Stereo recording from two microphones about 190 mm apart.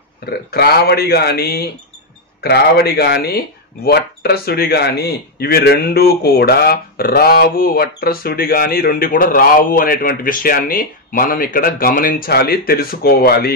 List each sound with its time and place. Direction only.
0.2 s speech: 55° left (ahead or behind)